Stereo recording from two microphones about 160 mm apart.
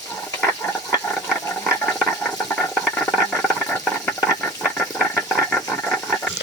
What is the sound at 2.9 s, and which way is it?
Rattle, centre (ahead or behind).